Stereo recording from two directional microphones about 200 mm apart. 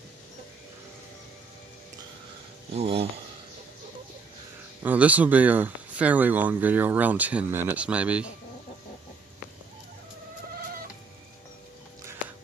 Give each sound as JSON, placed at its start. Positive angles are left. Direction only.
{"t": 2.7, "sound": "speech", "side_deg": -30}
{"t": 4.8, "sound": "speech", "side_deg": -5}